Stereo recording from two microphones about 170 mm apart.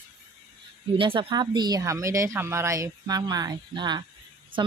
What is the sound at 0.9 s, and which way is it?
Speech, 30° right (ahead or behind).